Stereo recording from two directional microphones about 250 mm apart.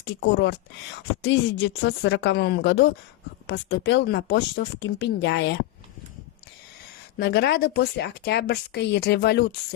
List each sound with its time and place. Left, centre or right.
0.0 s speech: left
7.2 s speech: left